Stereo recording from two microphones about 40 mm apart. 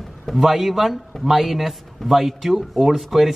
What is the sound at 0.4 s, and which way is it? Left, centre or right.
A man's voice, centre.